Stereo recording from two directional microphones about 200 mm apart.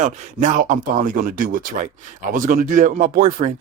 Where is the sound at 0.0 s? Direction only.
40° right (ahead or behind).